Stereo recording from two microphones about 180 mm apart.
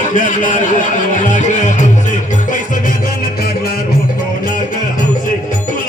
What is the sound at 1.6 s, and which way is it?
Music, 45° left (ahead or behind).